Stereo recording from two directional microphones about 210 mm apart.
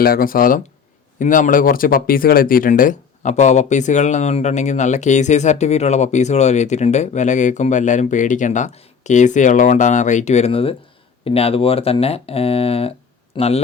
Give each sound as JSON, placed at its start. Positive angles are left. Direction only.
{"t": 0.0, "sound": "speech", "side_deg": 45}